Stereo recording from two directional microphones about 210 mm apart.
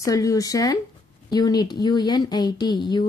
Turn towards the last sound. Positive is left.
turn(degrees=20)  # may be behind; listen again after turning